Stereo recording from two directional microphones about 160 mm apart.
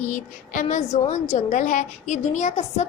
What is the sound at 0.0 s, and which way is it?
A woman's voice, 55° left (ahead or behind).